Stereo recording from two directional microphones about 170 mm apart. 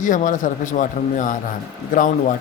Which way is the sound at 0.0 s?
50° left (ahead or behind).